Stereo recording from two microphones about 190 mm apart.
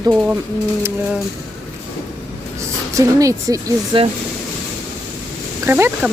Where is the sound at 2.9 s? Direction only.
15° right (ahead or behind).